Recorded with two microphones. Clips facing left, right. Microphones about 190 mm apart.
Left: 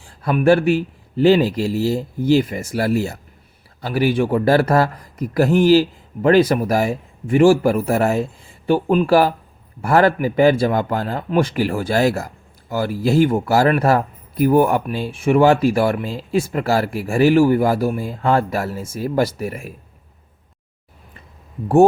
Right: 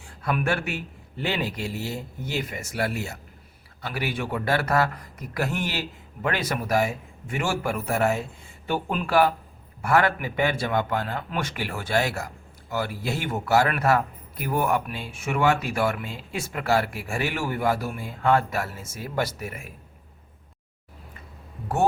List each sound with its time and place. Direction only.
0.0 s speech: 35° left (ahead or behind)